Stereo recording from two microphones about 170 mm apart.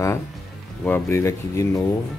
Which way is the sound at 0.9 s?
15° left (ahead or behind).